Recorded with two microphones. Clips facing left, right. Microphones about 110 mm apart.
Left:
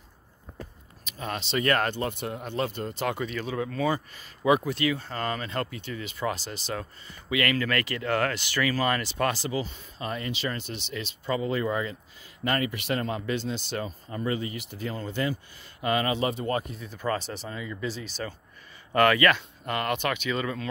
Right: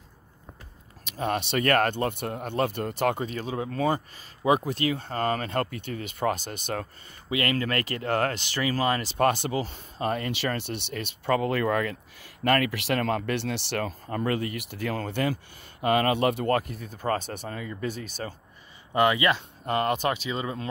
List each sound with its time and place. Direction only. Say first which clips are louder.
1.0 s speech: right 6 dB; 65° right (ahead or behind)
3.2 s speech: even; 40° right (ahead or behind)
3.5 s speech: even; 25° right (ahead or behind)
4.5 s speech: even; 35° right (ahead or behind)
7.2 s speech: even; 35° right (ahead or behind)
9.0 s speech: right 4 dB; 40° right (ahead or behind); by 15.3 s 65° right (ahead or behind)
15.8 s speech: right 3 dB; 50° right (ahead or behind)
18.9 s speech: left 1 dB; 20° right (ahead or behind)
19.6 s speech: right 5 dB; 30° right (ahead or behind)